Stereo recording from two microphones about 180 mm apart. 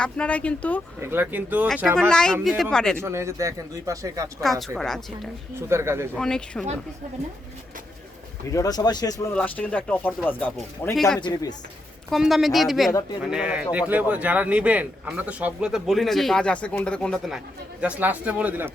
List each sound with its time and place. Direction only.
0.0 s speech: 5° left (ahead or behind)
0.9 s speech: 10° right (ahead or behind)
2.0 s speech: 5° left (ahead or behind)
3.0 s speech: 15° right (ahead or behind)
4.8 s speech: centre (ahead or behind)
5.5 s speech: 15° right (ahead or behind)
6.1 s speech: 5° left (ahead or behind)
8.5 s speech: 20° left (ahead or behind)
9.3 s speech: 5° left (ahead or behind)
11.2 s speech: 25° left (ahead or behind)
12.1 s speech: centre (ahead or behind)